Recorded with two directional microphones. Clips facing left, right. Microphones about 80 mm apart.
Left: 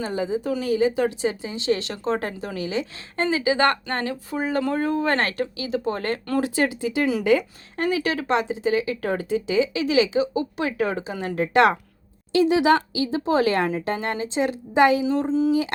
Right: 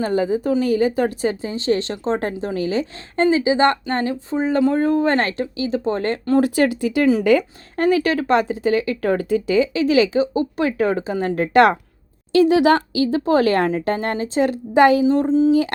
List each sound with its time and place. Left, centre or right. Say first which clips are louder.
0.0 s speech: right 6 dB; right
3.2 s speech: right 4 dB; right
6.4 s speech: right 5 dB; right
12.3 s speech: right 4 dB; right
15.0 s speech: right 6 dB; right